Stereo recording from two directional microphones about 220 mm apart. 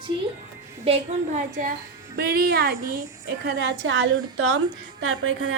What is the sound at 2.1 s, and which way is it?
A woman's voice, 45° right (ahead or behind).